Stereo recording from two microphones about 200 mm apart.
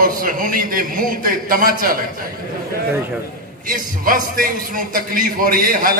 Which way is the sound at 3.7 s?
45° right (ahead or behind).